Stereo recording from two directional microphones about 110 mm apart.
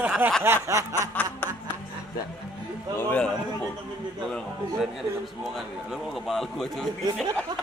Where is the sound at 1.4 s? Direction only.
20° left (ahead or behind).